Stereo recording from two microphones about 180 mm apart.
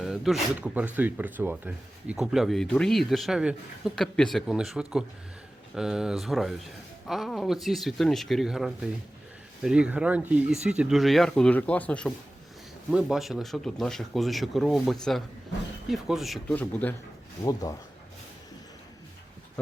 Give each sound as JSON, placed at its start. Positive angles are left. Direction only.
{"t": 0.0, "sound": "speech", "side_deg": 0}
{"t": 17.4, "sound": "speech", "side_deg": 20}